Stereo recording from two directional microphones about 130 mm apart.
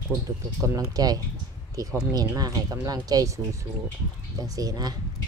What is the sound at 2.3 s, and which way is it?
Speech, 30° right (ahead or behind).